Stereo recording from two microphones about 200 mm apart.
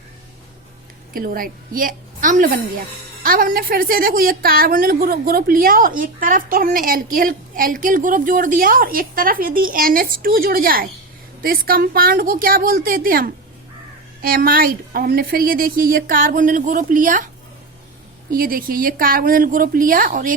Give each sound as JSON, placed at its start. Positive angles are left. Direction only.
{"t": 1.1, "sound": "a woman's voice", "side_deg": -45}
{"t": 18.3, "sound": "a woman's voice", "side_deg": -45}